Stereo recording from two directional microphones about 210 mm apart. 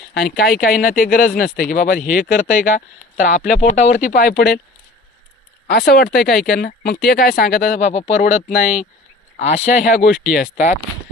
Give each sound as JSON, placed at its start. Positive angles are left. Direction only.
{"t": 0.1, "sound": "speech", "side_deg": 45}
{"t": 5.6, "sound": "speech", "side_deg": 50}